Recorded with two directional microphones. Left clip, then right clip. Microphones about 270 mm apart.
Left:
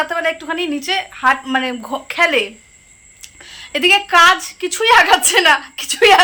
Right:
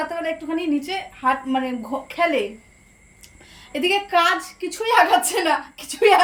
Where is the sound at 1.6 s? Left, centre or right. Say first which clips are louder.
Left 5 dB; left.